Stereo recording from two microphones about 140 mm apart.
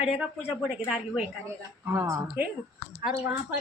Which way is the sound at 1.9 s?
20° right (ahead or behind).